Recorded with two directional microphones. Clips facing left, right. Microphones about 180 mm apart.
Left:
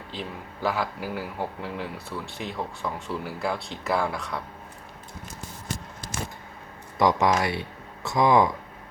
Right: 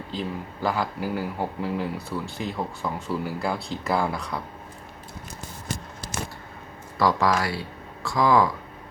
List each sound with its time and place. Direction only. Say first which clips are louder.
0.1 s a man's voice: right 5 dB; centre (ahead or behind)
7.0 s speech: left 1 dB; 20° left (ahead or behind)